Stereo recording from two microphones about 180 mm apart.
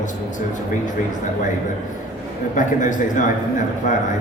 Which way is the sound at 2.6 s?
45° left (ahead or behind).